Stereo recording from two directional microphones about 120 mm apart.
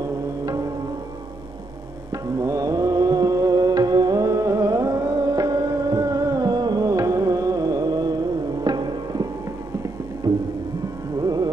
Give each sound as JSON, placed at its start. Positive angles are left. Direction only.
{"t": 0.0, "sound": "music", "side_deg": -30}
{"t": 2.3, "sound": "music", "side_deg": -30}
{"t": 11.1, "sound": "music", "side_deg": -35}